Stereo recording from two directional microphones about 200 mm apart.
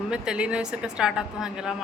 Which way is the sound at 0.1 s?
5° right (ahead or behind).